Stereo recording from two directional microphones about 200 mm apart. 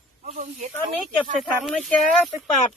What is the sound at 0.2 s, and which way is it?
Speech, 40° right (ahead or behind).